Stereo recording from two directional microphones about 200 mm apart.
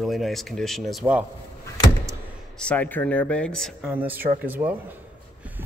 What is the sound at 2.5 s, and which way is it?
Speech, 5° left (ahead or behind).